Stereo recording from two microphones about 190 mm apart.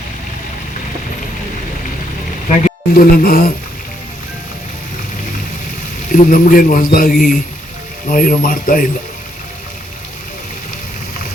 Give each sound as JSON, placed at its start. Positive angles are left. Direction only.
{"t": 2.6, "sound": "music", "side_deg": 50}
{"t": 6.1, "sound": "a man's voice", "side_deg": 45}